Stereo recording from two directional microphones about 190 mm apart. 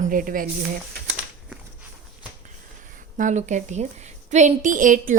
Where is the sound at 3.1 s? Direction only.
40° right (ahead or behind).